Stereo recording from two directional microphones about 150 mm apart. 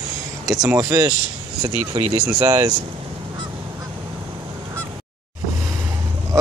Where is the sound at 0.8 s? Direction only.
20° right (ahead or behind).